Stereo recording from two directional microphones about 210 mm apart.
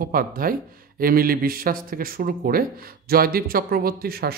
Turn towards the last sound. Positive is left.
turn(degrees=-45)  # may be behind; listen again after turning